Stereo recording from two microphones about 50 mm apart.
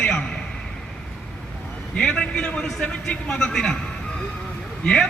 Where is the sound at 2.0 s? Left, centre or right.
Centre.